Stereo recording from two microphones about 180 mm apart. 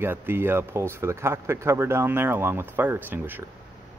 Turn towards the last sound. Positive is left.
turn(degrees=-10)  # may be behind; listen again after turning